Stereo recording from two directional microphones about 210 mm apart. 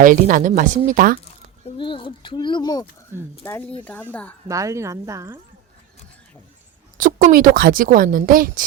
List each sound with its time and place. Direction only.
0.0 s a woman's voice: 40° right (ahead or behind)
1.6 s a woman's voice: 25° left (ahead or behind); by 4.4 s 5° left (ahead or behind)
4.4 s a woman's voice: 15° right (ahead or behind)
6.9 s a woman's voice: 40° right (ahead or behind)